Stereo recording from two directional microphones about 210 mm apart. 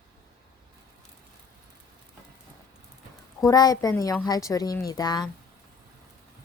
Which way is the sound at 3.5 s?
15° left (ahead or behind).